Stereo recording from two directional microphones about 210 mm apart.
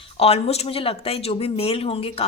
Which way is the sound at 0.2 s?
30° left (ahead or behind).